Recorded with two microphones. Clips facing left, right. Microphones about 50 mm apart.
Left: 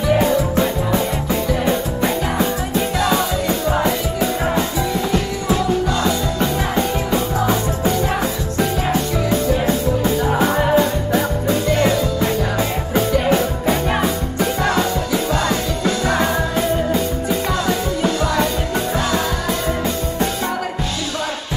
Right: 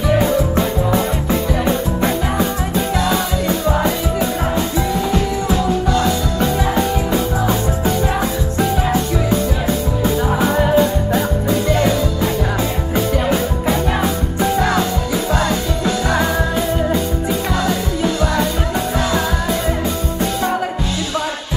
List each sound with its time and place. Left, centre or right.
3.4 s music: right
10.4 s music: centre
12.9 s music: centre